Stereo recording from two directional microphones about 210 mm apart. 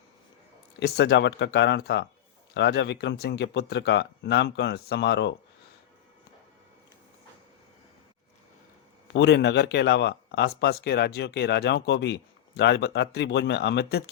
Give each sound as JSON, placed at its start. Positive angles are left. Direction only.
{"t": 0.8, "sound": "speech", "side_deg": 50}
{"t": 9.1, "sound": "speech", "side_deg": 55}